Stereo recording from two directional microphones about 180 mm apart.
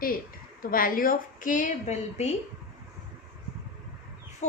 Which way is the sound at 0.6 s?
55° left (ahead or behind).